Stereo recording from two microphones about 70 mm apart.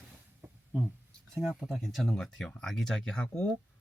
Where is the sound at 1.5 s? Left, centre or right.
Centre.